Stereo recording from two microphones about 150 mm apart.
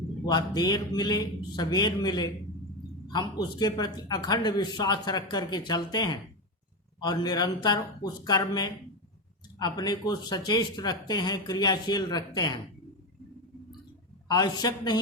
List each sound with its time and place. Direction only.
0.3 s speech: 25° left (ahead or behind)
14.3 s speech: 25° left (ahead or behind)